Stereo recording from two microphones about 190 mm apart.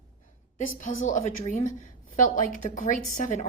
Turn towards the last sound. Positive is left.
turn(degrees=40)  # may be behind; listen again after turning